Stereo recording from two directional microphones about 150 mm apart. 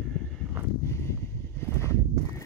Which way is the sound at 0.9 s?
20° left (ahead or behind).